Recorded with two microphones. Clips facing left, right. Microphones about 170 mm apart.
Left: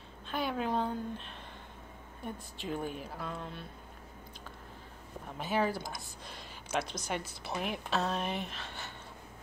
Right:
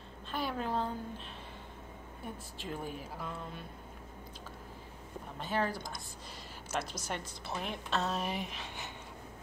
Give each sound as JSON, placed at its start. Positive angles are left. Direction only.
{"t": 0.3, "sound": "a sound", "side_deg": 0}
{"t": 2.2, "sound": "a woman's voice", "side_deg": 0}
{"t": 5.4, "sound": "a woman's voice", "side_deg": 5}